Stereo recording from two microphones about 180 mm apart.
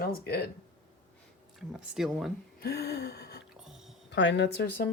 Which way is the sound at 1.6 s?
Centre (ahead or behind).